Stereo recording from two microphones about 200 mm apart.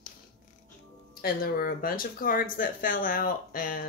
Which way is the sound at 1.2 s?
45° left (ahead or behind).